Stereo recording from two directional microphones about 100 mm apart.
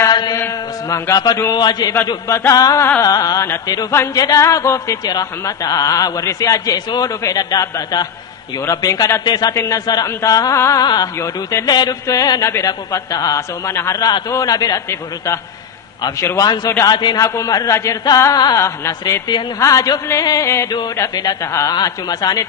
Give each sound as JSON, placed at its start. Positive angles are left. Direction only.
{"t": 0.1, "sound": "chant", "side_deg": 45}
{"t": 0.8, "sound": "a man's voice", "side_deg": 30}
{"t": 1.5, "sound": "a man's voice", "side_deg": 45}
{"t": 2.0, "sound": "speech", "side_deg": 30}
{"t": 3.9, "sound": "a woman's voice", "side_deg": 25}
{"t": 16.8, "sound": "a man's voice", "side_deg": 45}
{"t": 17.2, "sound": "speech", "side_deg": 35}